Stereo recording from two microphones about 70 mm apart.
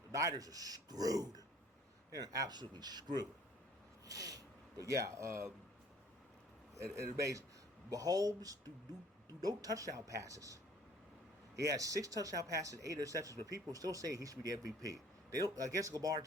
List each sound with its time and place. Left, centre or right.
0.1 s speech: right
4.0 s a sound: right
4.8 s speech: right
6.7 s speech: right
11.6 s speech: right